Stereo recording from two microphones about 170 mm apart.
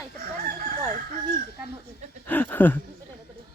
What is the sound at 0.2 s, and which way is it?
Crowing, 55° right (ahead or behind).